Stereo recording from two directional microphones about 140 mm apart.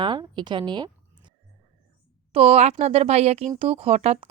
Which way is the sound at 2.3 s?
45° right (ahead or behind).